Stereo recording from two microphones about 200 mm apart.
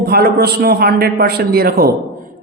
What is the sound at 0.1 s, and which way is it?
A man's voice, 50° right (ahead or behind).